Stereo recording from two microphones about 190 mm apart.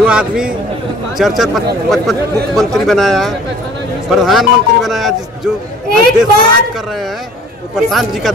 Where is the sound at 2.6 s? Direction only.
Centre (ahead or behind).